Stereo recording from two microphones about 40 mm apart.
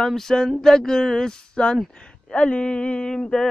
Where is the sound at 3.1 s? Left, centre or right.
Centre.